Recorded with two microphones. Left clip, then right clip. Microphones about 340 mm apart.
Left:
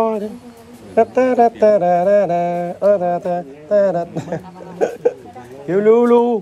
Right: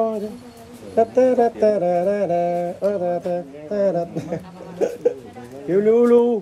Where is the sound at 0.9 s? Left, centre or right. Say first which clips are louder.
Left 3 dB; centre.